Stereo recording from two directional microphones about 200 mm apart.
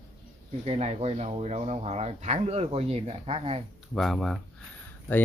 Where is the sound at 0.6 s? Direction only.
30° right (ahead or behind).